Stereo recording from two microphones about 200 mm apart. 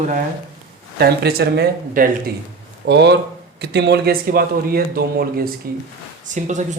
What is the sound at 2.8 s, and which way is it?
Speech, 60° right (ahead or behind).